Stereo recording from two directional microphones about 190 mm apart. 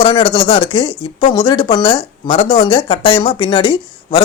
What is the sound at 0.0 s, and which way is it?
Speech, 25° left (ahead or behind).